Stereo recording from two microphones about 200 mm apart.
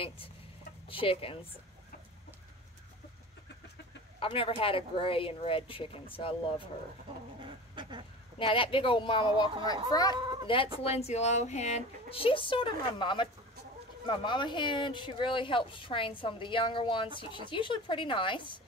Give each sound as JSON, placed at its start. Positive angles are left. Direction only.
{"t": 0.8, "sound": "speech", "side_deg": 25}
{"t": 4.2, "sound": "speech", "side_deg": 25}
{"t": 7.4, "sound": "bird", "side_deg": -25}
{"t": 8.4, "sound": "speech", "side_deg": 25}